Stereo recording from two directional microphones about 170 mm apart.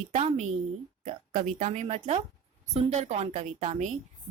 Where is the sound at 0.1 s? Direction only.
40° right (ahead or behind).